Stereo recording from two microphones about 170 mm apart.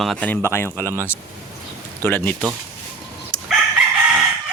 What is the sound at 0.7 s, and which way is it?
Speech, 15° right (ahead or behind).